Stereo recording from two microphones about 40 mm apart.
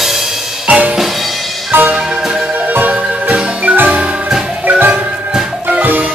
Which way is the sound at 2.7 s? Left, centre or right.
Right.